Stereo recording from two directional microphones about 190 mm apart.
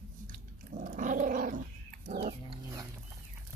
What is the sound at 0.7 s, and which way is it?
Dog, 45° right (ahead or behind).